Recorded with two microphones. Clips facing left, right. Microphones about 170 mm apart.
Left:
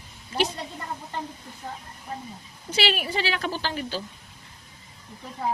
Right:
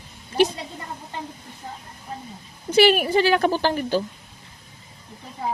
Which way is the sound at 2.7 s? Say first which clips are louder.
Right 10 dB; 50° right (ahead or behind).